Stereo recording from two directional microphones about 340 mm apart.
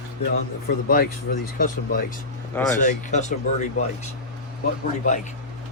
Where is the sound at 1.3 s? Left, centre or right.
Left.